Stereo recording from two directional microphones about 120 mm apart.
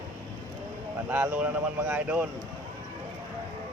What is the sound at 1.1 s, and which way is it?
Speech, 10° right (ahead or behind).